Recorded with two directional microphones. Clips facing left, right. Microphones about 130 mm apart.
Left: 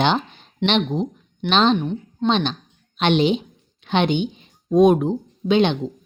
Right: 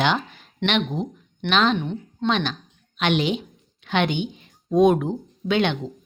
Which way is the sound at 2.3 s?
25° left (ahead or behind).